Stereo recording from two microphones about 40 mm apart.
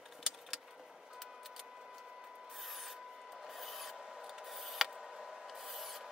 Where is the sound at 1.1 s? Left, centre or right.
Centre.